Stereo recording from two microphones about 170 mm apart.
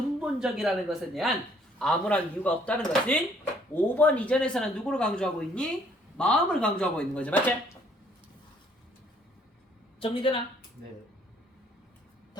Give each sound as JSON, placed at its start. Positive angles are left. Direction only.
{"t": 0.2, "sound": "speech", "side_deg": -5}
{"t": 10.0, "sound": "a woman's voice", "side_deg": 30}